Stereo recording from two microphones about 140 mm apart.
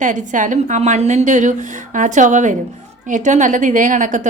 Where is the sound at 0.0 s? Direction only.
65° right (ahead or behind).